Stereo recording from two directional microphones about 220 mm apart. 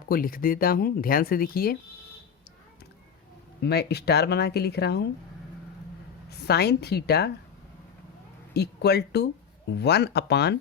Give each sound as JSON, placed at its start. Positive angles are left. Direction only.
{"t": 0.1, "sound": "speech", "side_deg": 40}
{"t": 3.6, "sound": "speech", "side_deg": 50}
{"t": 6.5, "sound": "speech", "side_deg": 50}
{"t": 8.5, "sound": "speech", "side_deg": 45}